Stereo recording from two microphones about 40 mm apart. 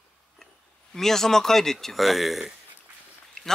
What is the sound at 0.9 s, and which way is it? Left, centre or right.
Speech, centre.